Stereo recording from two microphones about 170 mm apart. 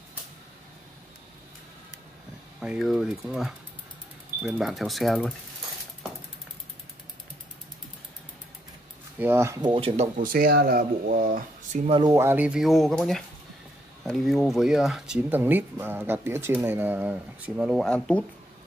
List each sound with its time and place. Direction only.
2.6 s speech: centre (ahead or behind)
9.2 s speech: 15° right (ahead or behind)
9.6 s speech: 30° right (ahead or behind)
10.1 s speech: 55° right (ahead or behind)
11.8 s speech: 30° right (ahead or behind)
12.1 s speech: 15° right (ahead or behind); by 18.2 s 5° left (ahead or behind)